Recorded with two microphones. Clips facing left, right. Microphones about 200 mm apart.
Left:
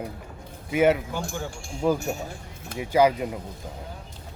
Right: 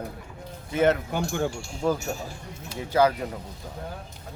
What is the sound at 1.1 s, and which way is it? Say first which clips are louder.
Speech: right 5 dB; 60° right (ahead or behind).